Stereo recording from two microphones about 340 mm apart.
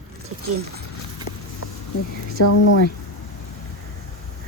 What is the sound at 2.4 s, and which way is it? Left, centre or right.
Speech, left.